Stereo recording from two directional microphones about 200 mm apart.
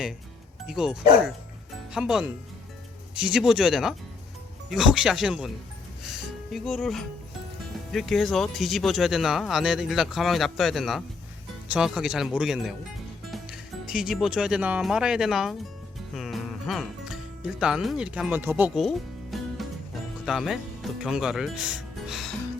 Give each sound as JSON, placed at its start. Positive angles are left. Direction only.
{"t": 0.7, "sound": "speech", "side_deg": -5}
{"t": 13.9, "sound": "speech", "side_deg": -5}
{"t": 16.1, "sound": "music", "side_deg": 0}
{"t": 20.2, "sound": "speech", "side_deg": 0}